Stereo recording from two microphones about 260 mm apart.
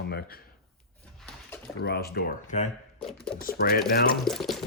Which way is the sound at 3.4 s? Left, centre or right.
Left.